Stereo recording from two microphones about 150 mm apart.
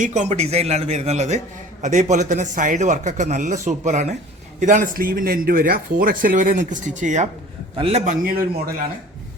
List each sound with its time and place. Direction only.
0.0 s a man's voice: 55° right (ahead or behind)
7.8 s a man's voice: 40° right (ahead or behind)
8.0 s a man's voice: 65° right (ahead or behind)